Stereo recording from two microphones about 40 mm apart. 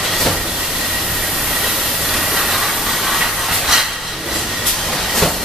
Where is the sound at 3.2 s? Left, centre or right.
Centre.